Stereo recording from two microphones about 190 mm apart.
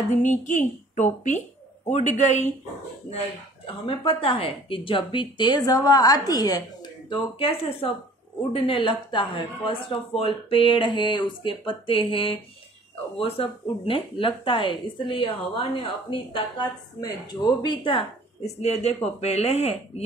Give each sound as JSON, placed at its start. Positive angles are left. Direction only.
{"t": 0.1, "sound": "a woman's voice", "side_deg": 40}
{"t": 3.6, "sound": "a woman's voice", "side_deg": 25}